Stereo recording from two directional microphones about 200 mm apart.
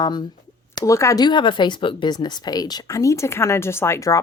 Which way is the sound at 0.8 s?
15° left (ahead or behind).